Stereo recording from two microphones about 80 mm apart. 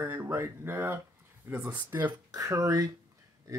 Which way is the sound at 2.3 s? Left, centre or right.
Right.